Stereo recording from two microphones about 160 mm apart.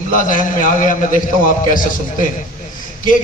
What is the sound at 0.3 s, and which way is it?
Speech, 55° left (ahead or behind).